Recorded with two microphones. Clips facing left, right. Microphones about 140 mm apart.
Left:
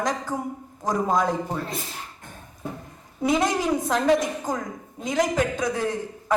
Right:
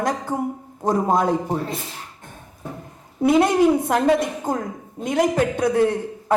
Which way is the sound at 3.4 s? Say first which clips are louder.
Right 6 dB; 60° right (ahead or behind).